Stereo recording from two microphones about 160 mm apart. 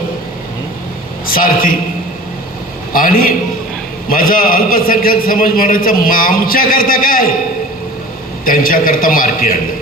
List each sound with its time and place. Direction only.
1.3 s a man's voice: 60° left (ahead or behind)
2.9 s a man's voice: 60° left (ahead or behind)
8.4 s a man's voice: 60° left (ahead or behind)